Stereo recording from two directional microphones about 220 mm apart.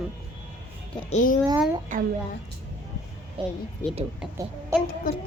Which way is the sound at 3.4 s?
25° right (ahead or behind).